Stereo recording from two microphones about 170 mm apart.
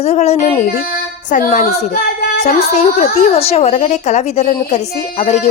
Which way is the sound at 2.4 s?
40° left (ahead or behind).